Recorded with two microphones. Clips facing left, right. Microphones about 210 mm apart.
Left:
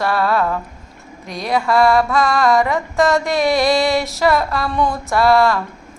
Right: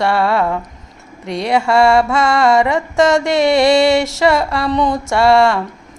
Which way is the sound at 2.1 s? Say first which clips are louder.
Right 2 dB; 80° right.